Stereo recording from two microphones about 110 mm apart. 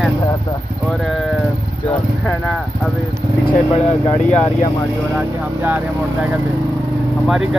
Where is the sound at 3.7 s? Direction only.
75° left (ahead or behind).